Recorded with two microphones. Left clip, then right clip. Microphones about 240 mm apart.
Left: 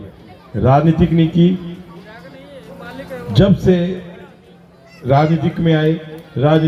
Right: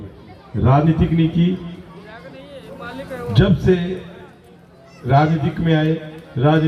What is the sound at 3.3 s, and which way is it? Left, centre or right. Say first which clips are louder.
Speech: left 3 dB; left.